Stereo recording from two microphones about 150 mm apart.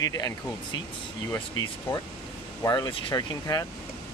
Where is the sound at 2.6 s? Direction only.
25° left (ahead or behind).